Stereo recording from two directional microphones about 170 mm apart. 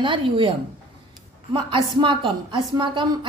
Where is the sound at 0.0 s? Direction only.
30° right (ahead or behind).